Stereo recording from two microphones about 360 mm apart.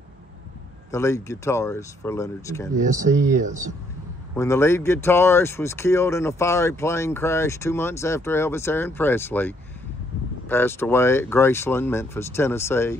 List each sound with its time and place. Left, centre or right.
0.9 s speech: centre
2.7 s speech: right
4.4 s speech: centre